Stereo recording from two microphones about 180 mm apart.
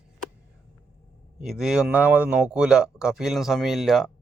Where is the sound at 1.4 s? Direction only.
Centre (ahead or behind).